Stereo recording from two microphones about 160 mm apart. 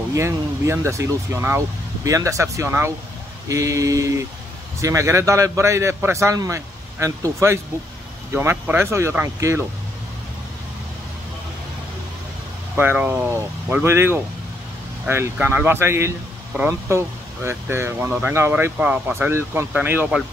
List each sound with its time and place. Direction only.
0.1 s a man's voice: 20° right (ahead or behind)
12.7 s speech: 10° right (ahead or behind)